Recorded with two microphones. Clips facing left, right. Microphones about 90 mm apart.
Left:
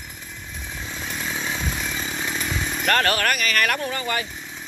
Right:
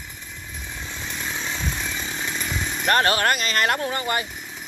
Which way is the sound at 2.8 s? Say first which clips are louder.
Right 1 dB; 20° right (ahead or behind).